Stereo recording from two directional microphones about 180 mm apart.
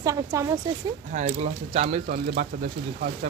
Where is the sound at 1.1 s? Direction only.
40° right (ahead or behind).